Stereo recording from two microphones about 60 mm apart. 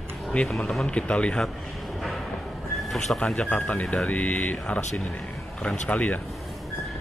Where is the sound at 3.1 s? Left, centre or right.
Centre.